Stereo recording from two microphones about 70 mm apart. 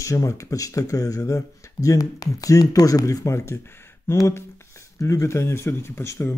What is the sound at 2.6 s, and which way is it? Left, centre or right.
Speech, left.